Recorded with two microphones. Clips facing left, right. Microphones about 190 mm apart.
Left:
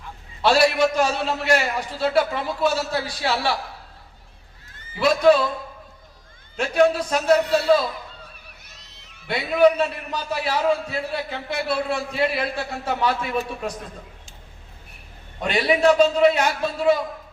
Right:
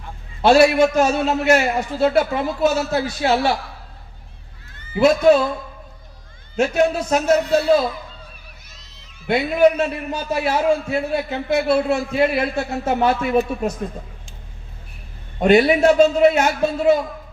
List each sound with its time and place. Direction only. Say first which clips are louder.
0.4 s a man's voice: right 5 dB; 45° right (ahead or behind)
4.9 s a man's voice: right 3 dB; 45° right (ahead or behind)
6.6 s a man's voice: right 1 dB; 45° right (ahead or behind)
8.7 s a sound: right 1 dB; 65° left (ahead or behind)
9.2 s a man's voice: right 2 dB; 50° right (ahead or behind)
15.4 s a man's voice: right 7 dB; 45° right (ahead or behind)